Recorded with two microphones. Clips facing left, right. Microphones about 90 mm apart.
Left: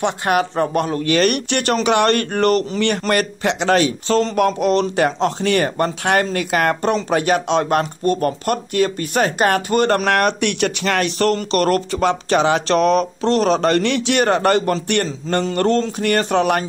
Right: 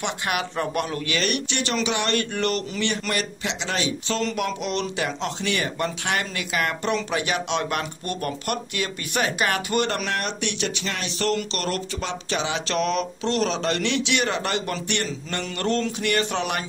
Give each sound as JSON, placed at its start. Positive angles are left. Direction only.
{"t": 0.0, "sound": "speech", "side_deg": 40}